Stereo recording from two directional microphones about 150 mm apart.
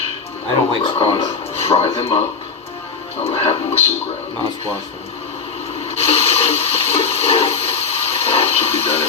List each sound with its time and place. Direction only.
0.9 s speech: 35° left (ahead or behind)
3.2 s speech: 40° left (ahead or behind)
5.8 s a sound: 40° left (ahead or behind)